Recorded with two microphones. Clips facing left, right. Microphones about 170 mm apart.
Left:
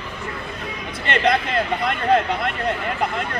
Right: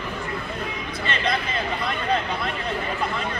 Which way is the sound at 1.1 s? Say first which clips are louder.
Left 7 dB; 60° left (ahead or behind).